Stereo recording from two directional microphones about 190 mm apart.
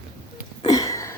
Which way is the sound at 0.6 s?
20° left (ahead or behind).